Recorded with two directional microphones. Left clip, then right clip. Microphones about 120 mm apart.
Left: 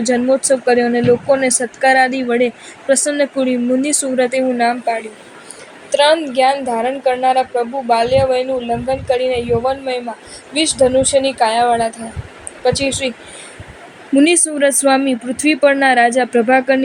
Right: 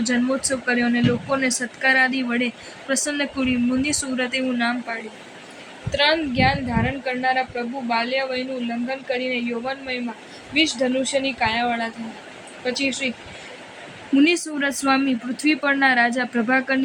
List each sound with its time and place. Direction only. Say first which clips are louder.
0.0 s speech: left 8 dB; 40° left (ahead or behind)
5.9 s a woman's voice: left 7 dB; 75° left (ahead or behind)
14.2 s speech: left 7 dB; 40° left (ahead or behind)